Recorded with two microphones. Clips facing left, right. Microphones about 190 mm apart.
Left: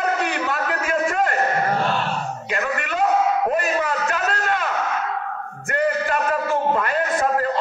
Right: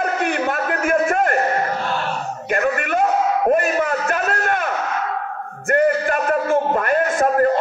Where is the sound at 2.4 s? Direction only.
50° right (ahead or behind).